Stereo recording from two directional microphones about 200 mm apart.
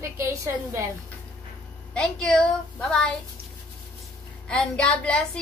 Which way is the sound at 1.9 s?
5° left (ahead or behind).